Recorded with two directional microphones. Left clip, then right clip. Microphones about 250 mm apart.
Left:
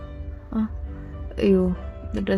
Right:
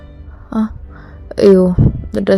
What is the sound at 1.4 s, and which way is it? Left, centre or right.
Speech, right.